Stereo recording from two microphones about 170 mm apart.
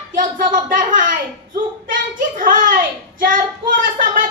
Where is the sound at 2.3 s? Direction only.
50° right (ahead or behind).